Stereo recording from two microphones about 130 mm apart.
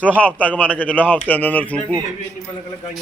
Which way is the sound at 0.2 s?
10° left (ahead or behind).